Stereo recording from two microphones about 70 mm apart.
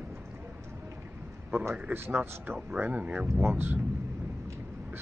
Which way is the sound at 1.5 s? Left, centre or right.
Right.